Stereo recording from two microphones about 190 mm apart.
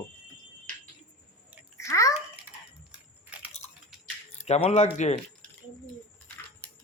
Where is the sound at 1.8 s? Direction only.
15° left (ahead or behind).